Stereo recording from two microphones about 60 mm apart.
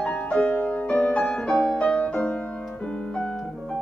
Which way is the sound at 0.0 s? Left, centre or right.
Centre.